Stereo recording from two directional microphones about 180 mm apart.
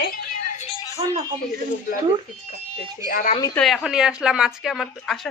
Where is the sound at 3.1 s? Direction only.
50° left (ahead or behind).